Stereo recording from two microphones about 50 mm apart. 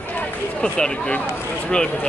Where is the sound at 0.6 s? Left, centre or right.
Centre.